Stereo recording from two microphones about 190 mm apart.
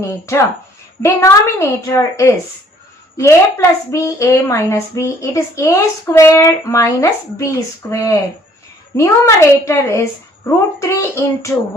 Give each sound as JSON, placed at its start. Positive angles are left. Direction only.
{"t": 0.0, "sound": "a woman's voice", "side_deg": 15}